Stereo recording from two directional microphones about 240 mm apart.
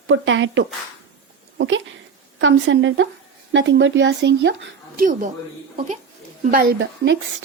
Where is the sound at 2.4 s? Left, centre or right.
Right.